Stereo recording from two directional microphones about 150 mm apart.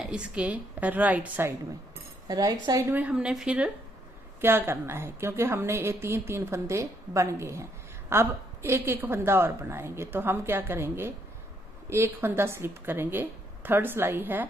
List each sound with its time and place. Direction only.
0.0 s a woman's voice: 5° right (ahead or behind)
2.2 s a woman's voice: 25° right (ahead or behind)